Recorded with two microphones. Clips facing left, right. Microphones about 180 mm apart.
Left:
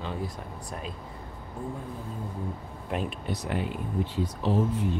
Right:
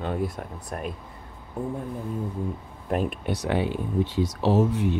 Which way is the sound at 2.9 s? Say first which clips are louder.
Right 6 dB; 45° right (ahead or behind).